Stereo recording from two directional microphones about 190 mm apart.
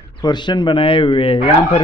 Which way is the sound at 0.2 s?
25° left (ahead or behind).